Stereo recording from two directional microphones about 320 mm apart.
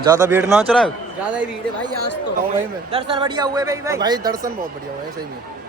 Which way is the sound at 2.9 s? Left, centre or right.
Centre.